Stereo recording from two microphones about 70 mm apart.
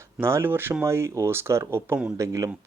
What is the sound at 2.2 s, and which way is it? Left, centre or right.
Speech, right.